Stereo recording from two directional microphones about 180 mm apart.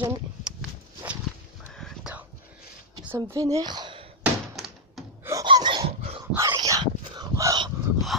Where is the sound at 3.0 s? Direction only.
15° right (ahead or behind).